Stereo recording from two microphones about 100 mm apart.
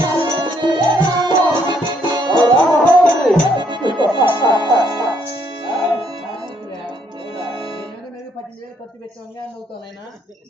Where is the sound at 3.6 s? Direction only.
50° right (ahead or behind).